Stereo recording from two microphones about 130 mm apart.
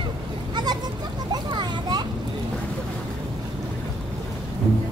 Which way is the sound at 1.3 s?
35° right (ahead or behind).